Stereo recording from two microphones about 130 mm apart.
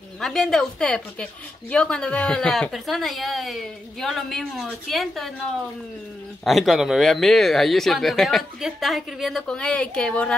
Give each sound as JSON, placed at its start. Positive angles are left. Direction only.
{"t": 0.2, "sound": "a woman's voice", "side_deg": 5}
{"t": 6.4, "sound": "a woman's voice", "side_deg": 0}